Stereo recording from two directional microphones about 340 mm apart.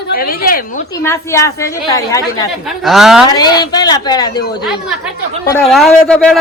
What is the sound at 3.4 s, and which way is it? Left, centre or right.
Speech, centre.